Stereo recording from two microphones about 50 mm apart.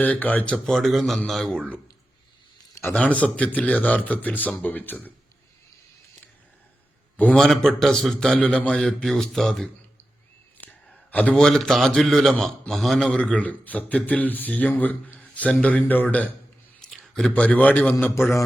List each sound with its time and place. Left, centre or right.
0.0 s speech: left
0.6 s a man's voice: centre
2.9 s speech: left
7.3 s a man's voice: centre
8.3 s a man's voice: left
8.8 s a man's voice: centre
11.1 s a man's voice: left
11.3 s a man's voice: centre
13.1 s speech: left
16.9 s a sound: centre
17.3 s speech: left